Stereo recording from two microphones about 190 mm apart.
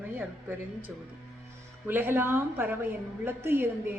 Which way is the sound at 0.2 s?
10° right (ahead or behind).